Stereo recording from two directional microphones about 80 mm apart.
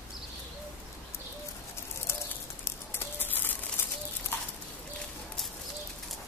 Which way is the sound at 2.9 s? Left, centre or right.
Left.